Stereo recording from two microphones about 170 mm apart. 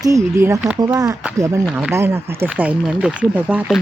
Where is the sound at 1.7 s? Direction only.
10° right (ahead or behind).